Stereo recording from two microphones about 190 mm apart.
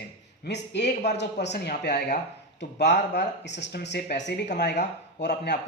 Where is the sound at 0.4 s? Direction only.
65° left (ahead or behind).